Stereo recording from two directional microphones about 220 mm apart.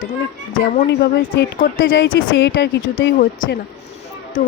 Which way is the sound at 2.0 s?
50° left (ahead or behind).